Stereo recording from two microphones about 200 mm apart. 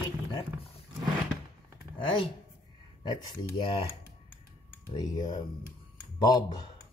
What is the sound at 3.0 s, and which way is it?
Speech, 20° left (ahead or behind).